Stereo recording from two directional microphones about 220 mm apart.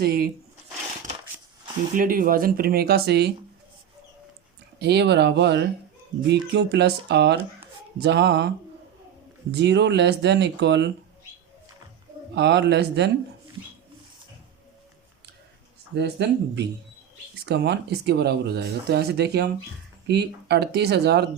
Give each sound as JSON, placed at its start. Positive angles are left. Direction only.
{"t": 0.0, "sound": "speech", "side_deg": -40}
{"t": 2.0, "sound": "speech", "side_deg": -40}
{"t": 4.8, "sound": "speech", "side_deg": -50}
{"t": 12.3, "sound": "speech", "side_deg": -50}
{"t": 16.0, "sound": "speech", "side_deg": -50}